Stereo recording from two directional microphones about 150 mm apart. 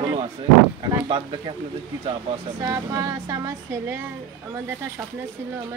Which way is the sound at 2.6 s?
25° right (ahead or behind).